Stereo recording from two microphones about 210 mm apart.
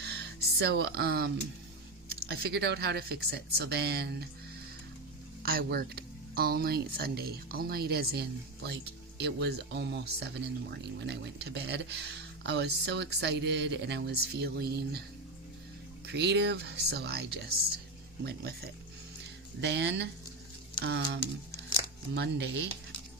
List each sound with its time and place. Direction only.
0.6 s speech: 50° right (ahead or behind)
5.4 s speech: 45° right (ahead or behind)
16.1 s speech: 55° right (ahead or behind)